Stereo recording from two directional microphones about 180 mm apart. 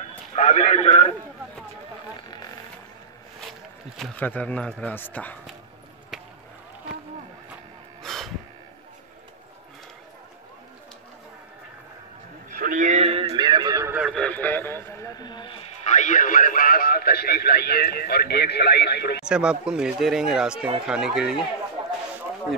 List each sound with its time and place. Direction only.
0.4 s a man's voice: 40° left (ahead or behind)
3.3 s speech: centre (ahead or behind)
8.0 s a sound: centre (ahead or behind)
12.5 s radio: 50° right (ahead or behind); by 14.0 s 15° right (ahead or behind)
14.0 s radio: 5° left (ahead or behind); by 15.6 s 25° left (ahead or behind)
15.8 s radio: 40° left (ahead or behind); by 19.2 s 65° left (ahead or behind)
19.2 s speech: 5° right (ahead or behind)